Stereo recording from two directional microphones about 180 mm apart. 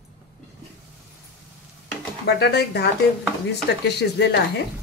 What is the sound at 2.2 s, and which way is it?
Speech, 65° left (ahead or behind).